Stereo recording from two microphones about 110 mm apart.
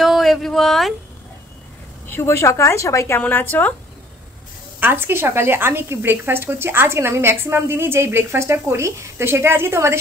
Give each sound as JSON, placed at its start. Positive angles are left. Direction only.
{"t": 0.0, "sound": "speech", "side_deg": 0}
{"t": 2.0, "sound": "speech", "side_deg": 20}
{"t": 4.7, "sound": "a woman's voice", "side_deg": -20}